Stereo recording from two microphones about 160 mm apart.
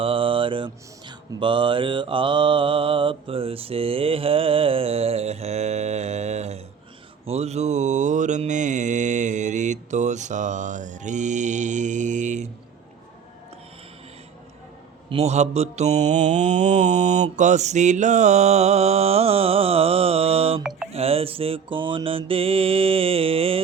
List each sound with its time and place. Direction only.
0.0 s mantra: 35° right (ahead or behind); by 12.5 s 50° right (ahead or behind)
15.1 s mantra: 40° right (ahead or behind)